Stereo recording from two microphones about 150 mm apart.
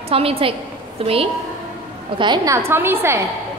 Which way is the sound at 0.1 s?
40° right (ahead or behind).